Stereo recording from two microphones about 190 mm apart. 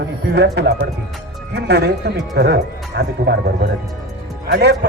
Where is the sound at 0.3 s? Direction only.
60° right (ahead or behind).